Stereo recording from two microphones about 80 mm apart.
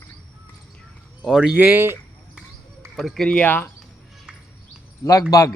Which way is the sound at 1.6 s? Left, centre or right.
Right.